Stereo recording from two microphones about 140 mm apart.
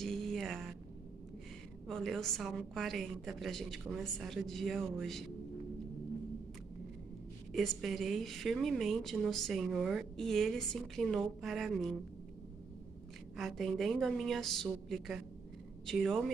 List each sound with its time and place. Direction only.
0.0 s a sound: 5° left (ahead or behind)
1.9 s a woman's voice: 5° left (ahead or behind)
7.5 s a woman's voice: centre (ahead or behind)
13.4 s a woman's voice: centre (ahead or behind)